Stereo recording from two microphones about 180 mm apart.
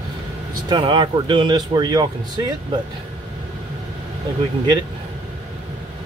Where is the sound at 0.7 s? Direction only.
25° right (ahead or behind).